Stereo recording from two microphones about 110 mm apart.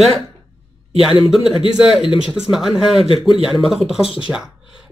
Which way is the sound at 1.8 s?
5° right (ahead or behind).